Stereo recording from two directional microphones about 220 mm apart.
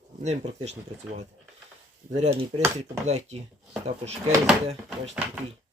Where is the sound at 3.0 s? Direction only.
30° right (ahead or behind).